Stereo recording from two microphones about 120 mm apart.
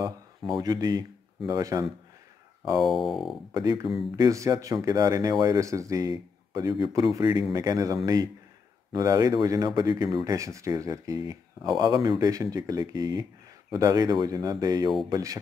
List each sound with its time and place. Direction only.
0.6 s speech: 35° right (ahead or behind)
2.8 s speech: centre (ahead or behind)
3.5 s a man's voice: 35° right (ahead or behind)